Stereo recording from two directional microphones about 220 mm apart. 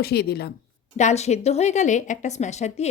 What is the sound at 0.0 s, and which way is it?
Speech, 45° left (ahead or behind).